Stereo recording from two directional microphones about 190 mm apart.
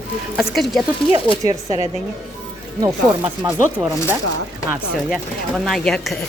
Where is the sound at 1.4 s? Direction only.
20° right (ahead or behind).